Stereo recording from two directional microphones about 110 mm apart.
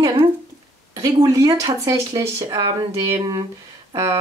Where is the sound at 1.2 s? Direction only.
30° right (ahead or behind).